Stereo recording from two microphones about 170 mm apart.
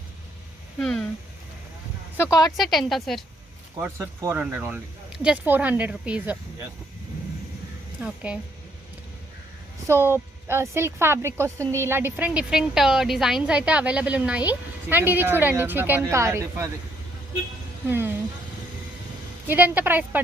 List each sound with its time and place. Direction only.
0.8 s a woman's voice: 5° left (ahead or behind)
2.1 s a woman's voice: 15° left (ahead or behind)
2.7 s a woman's voice: centre (ahead or behind)
3.8 s a woman's voice: 15° right (ahead or behind)
7.9 s a woman's voice: 10° right (ahead or behind)
9.8 s a woman's voice: 15° right (ahead or behind)
17.8 s a woman's voice: 10° right (ahead or behind)
19.5 s a woman's voice: 10° right (ahead or behind)